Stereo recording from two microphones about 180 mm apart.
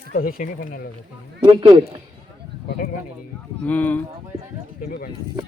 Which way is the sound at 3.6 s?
10° left (ahead or behind).